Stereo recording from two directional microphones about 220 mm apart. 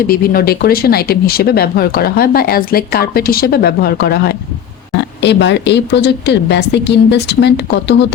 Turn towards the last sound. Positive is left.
turn(degrees=50)  # may be behind; listen again after turning